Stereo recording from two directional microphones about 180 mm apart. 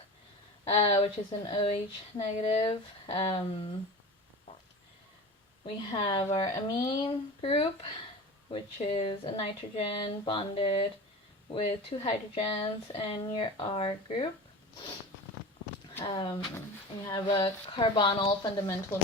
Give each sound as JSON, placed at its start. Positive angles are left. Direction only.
{"t": 0.6, "sound": "speech", "side_deg": 35}
{"t": 2.6, "sound": "speech", "side_deg": 20}
{"t": 5.6, "sound": "speech", "side_deg": 25}
{"t": 16.0, "sound": "speech", "side_deg": 25}